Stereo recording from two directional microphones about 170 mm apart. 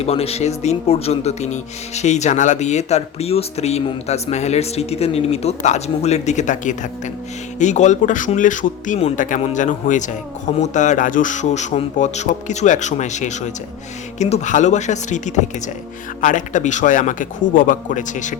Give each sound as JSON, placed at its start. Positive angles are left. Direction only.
{"t": 0.0, "sound": "speech", "side_deg": 35}
{"t": 16.2, "sound": "speech", "side_deg": 50}